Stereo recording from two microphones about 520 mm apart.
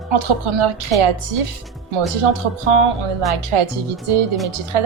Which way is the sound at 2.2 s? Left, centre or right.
Right.